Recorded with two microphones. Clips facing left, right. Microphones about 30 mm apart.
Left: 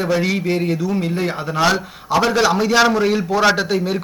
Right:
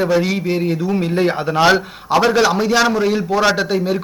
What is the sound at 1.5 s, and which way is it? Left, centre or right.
Speech, centre.